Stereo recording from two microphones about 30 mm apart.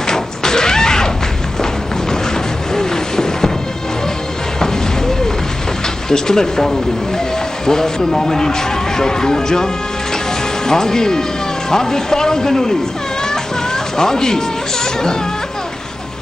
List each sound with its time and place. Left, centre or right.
0.0 s a sound: left
2.7 s music: centre
6.0 s speech: left
10.7 s speech: centre
13.9 s speech: left